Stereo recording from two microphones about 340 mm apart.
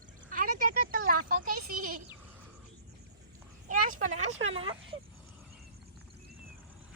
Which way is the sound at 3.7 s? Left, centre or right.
Right.